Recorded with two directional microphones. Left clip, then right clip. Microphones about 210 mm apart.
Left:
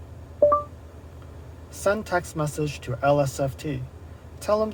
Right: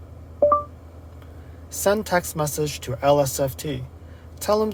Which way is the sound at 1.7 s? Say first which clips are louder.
Right 3 dB; 30° right (ahead or behind).